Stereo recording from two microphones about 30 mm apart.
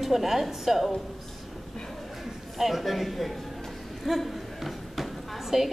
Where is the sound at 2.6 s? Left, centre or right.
Centre.